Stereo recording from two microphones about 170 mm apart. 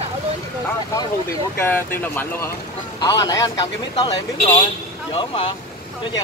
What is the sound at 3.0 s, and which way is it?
Speech, 20° left (ahead or behind).